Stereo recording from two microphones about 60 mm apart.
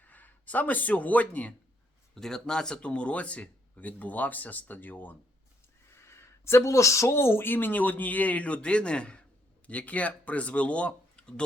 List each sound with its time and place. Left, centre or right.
0.0 s a man's voice: left
2.1 s speech: centre; by 5.1 s left
6.0 s speech: left; by 11.4 s centre